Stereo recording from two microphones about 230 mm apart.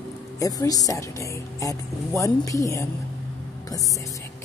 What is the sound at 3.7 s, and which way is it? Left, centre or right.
Speech, centre.